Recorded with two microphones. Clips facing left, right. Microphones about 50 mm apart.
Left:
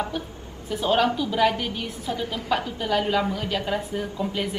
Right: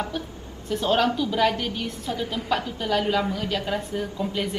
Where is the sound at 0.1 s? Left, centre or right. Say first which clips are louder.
Even; centre.